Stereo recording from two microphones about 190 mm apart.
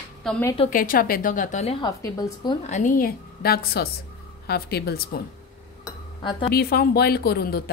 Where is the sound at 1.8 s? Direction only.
20° left (ahead or behind).